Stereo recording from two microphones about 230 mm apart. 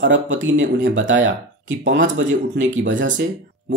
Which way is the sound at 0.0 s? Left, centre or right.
Right.